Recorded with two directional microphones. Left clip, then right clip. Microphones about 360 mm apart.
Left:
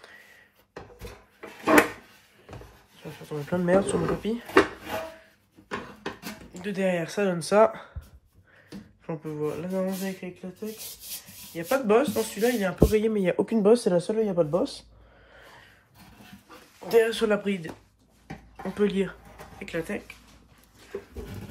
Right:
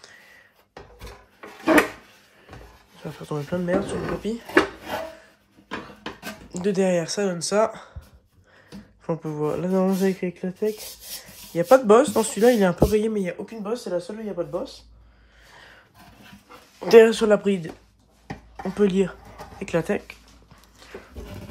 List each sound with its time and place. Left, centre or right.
3.0 s speech: centre
6.5 s speech: centre
9.0 s speech: centre
13.6 s speech: left
16.8 s speech: centre
18.8 s speech: centre